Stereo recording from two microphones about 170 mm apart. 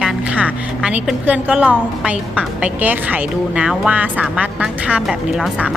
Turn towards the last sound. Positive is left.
turn(degrees=0)  # may be behind; listen again after turning